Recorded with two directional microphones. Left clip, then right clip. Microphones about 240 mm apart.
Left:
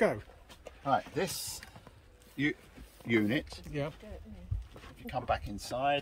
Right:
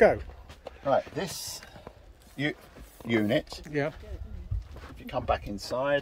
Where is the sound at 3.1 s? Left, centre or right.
Right.